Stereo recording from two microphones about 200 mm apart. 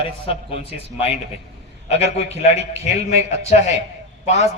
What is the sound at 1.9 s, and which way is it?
Speech, 35° left (ahead or behind).